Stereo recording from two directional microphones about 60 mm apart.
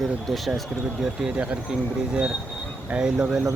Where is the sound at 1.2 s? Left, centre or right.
Centre.